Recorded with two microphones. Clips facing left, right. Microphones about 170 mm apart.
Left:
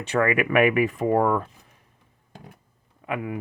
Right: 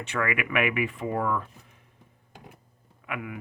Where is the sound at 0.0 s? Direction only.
35° left (ahead or behind).